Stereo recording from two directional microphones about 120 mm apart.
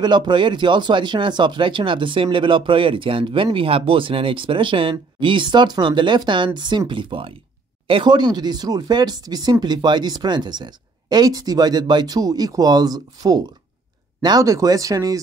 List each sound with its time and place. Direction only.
0.0 s speech: 40° right (ahead or behind)